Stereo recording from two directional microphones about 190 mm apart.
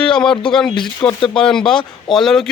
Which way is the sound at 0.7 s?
25° left (ahead or behind).